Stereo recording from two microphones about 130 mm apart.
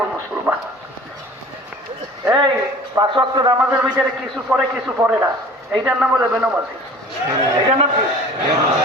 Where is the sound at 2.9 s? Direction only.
40° right (ahead or behind).